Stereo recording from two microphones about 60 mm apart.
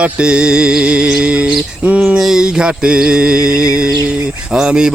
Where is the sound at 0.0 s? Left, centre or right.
Centre.